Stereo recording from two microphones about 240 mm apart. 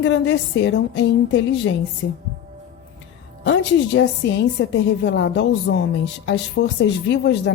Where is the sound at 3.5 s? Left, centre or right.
Left.